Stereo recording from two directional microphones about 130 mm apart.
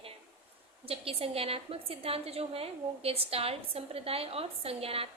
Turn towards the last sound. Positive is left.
turn(degrees=-50)  # may be behind; listen again after turning